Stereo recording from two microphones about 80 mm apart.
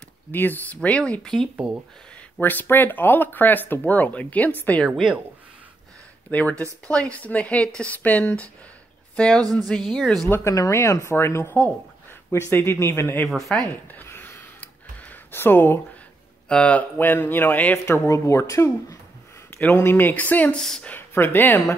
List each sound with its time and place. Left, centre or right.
0.3 s speech: left; by 1.5 s centre
2.4 s speech: left
6.3 s speech: centre
10.5 s speech: left
13.3 s speech: centre
13.9 s a sound: left
16.4 s speech: centre
18.0 s speech: left
19.6 s speech: left
20.5 s speech: centre
20.9 s speech: left